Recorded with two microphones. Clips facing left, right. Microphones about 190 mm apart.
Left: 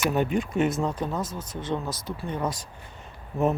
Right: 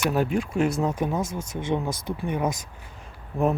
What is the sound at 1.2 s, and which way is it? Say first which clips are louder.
Speech: right 3 dB; 50° right (ahead or behind).